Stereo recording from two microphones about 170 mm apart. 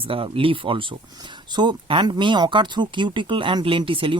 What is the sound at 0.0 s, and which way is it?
Speech, 30° right (ahead or behind).